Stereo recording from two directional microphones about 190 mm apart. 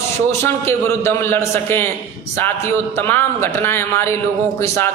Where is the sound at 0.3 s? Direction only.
15° left (ahead or behind).